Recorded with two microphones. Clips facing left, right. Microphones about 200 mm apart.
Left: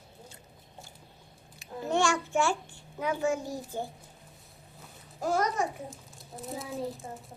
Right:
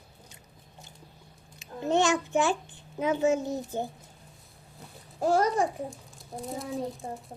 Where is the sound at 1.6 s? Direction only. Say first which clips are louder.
Right 3 dB; 20° right (ahead or behind).